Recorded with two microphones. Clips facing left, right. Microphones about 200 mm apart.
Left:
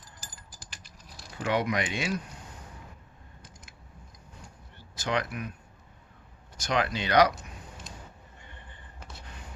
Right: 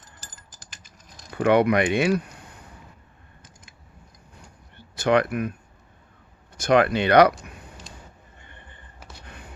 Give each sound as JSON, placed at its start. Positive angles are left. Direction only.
{"t": 1.3, "sound": "speech", "side_deg": -60}
{"t": 4.9, "sound": "speech", "side_deg": -60}
{"t": 6.6, "sound": "speech", "side_deg": -55}